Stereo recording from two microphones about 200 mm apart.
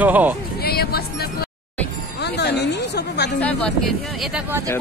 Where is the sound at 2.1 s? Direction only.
55° left (ahead or behind).